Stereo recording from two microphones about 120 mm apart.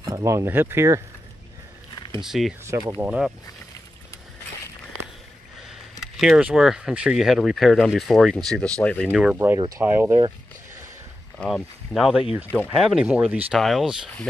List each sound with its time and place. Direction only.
0.0 s speech: 30° right (ahead or behind)
2.2 s speech: centre (ahead or behind)
5.7 s speech: centre (ahead or behind)
9.1 s speech: 5° right (ahead or behind)
9.8 s speech: 20° right (ahead or behind)
11.3 s speech: centre (ahead or behind)
13.6 s speech: centre (ahead or behind)